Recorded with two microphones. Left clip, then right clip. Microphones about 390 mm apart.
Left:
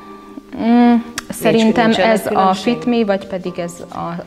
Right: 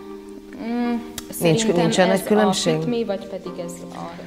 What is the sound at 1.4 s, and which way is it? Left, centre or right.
Speech, right.